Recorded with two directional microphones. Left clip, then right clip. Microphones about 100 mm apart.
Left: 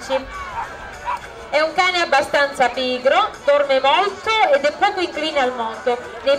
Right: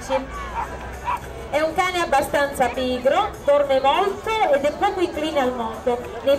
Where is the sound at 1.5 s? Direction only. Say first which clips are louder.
Left 4 dB; 25° left (ahead or behind).